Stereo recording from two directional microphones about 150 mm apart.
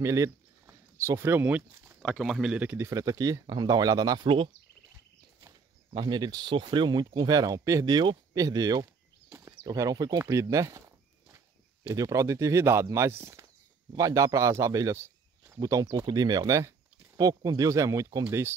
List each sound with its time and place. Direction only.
0.0 s a sound: 20° right (ahead or behind)
2.0 s speech: centre (ahead or behind)
2.9 s speech: 20° right (ahead or behind)
5.9 s speech: 30° right (ahead or behind)
9.3 s a sound: 20° right (ahead or behind)
11.9 s speech: 20° right (ahead or behind)